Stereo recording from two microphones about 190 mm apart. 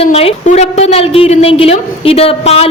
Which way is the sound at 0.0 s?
30° left (ahead or behind).